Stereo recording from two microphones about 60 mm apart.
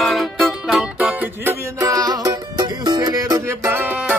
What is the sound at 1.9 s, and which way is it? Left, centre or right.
Music, right.